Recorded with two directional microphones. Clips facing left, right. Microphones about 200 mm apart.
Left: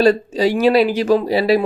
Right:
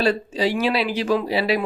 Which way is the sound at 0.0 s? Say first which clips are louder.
Left 6 dB; 40° left (ahead or behind).